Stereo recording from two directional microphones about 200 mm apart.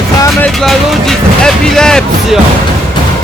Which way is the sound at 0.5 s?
Centre (ahead or behind).